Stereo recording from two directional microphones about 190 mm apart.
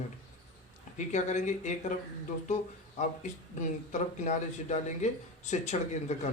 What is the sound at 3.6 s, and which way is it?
Speech, 40° left (ahead or behind).